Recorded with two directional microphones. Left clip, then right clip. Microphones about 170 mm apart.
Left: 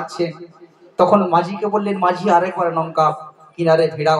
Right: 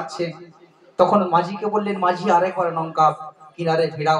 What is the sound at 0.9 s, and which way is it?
Speech, 35° left (ahead or behind).